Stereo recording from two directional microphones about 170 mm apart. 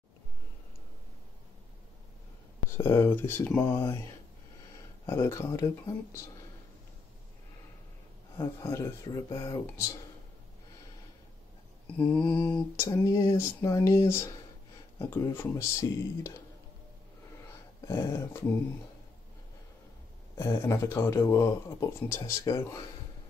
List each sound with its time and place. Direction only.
2.7 s speech: 15° left (ahead or behind)
5.0 s speech: 20° left (ahead or behind)
8.4 s a man's voice: 20° left (ahead or behind)
12.0 s speech: 10° left (ahead or behind)
17.8 s speech: 15° left (ahead or behind)
20.3 s speech: 20° left (ahead or behind)